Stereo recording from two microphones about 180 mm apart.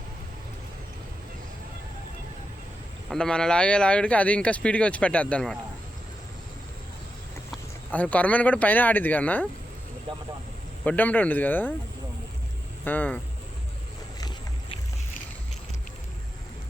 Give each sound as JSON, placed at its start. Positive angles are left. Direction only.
{"t": 3.1, "sound": "speech", "side_deg": 5}
{"t": 7.9, "sound": "speech", "side_deg": 10}
{"t": 10.8, "sound": "speech", "side_deg": 10}
{"t": 12.8, "sound": "speech", "side_deg": 10}
{"t": 14.2, "sound": "a sound", "side_deg": 25}